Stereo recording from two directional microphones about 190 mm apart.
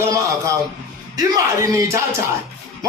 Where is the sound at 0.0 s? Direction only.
15° right (ahead or behind).